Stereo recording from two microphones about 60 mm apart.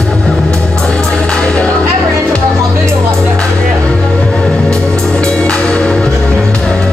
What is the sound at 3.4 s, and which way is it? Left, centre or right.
Music, centre.